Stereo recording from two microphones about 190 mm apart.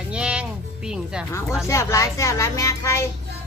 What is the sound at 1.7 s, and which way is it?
Speech, 15° left (ahead or behind).